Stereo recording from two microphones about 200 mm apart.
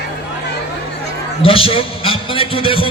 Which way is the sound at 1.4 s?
25° left (ahead or behind).